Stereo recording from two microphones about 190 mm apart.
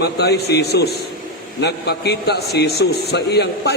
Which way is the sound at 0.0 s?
60° left (ahead or behind).